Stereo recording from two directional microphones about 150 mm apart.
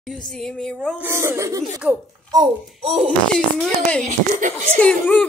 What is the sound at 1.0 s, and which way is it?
Speech, 15° right (ahead or behind).